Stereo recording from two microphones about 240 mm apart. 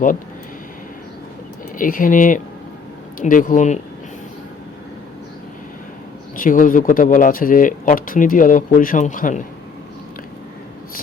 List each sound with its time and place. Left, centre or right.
1.8 s speech: left
6.3 s speech: left